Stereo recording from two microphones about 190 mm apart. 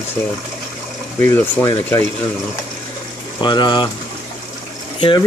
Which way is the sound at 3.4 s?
25° left (ahead or behind).